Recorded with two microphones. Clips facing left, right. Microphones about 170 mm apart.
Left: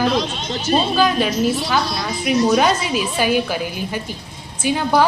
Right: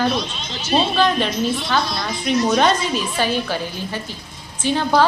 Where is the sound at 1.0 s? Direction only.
5° left (ahead or behind).